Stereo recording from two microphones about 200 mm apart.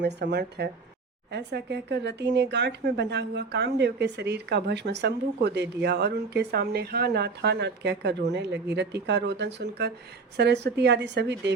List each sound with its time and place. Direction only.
0.0 s speech: 60° right (ahead or behind)